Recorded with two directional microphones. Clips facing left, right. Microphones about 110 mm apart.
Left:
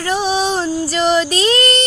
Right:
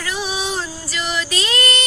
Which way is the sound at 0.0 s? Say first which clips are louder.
Left 8 dB; 35° left (ahead or behind).